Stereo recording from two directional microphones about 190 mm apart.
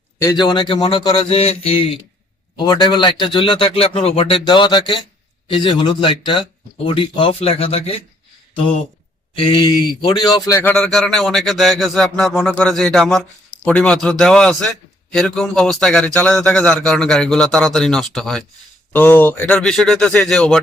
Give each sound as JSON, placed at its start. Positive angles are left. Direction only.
{"t": 0.2, "sound": "speech", "side_deg": 20}
{"t": 9.3, "sound": "a man's voice", "side_deg": 25}